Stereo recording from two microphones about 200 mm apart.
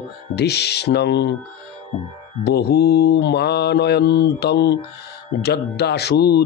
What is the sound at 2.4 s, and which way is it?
Speech, 55° left (ahead or behind).